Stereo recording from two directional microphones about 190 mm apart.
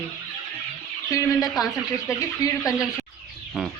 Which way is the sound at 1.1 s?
20° left (ahead or behind).